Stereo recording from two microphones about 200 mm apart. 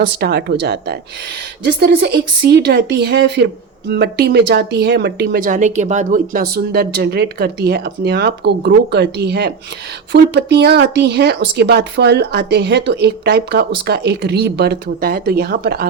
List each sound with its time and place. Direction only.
0.0 s speech: 55° right (ahead or behind)